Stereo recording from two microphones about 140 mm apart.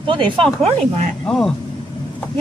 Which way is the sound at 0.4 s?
5° left (ahead or behind).